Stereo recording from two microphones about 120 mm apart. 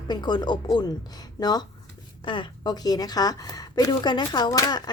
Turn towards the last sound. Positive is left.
turn(degrees=35)  # may be behind; listen again after turning